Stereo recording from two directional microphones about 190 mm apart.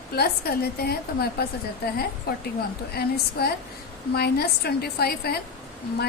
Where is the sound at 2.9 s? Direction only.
55° left (ahead or behind).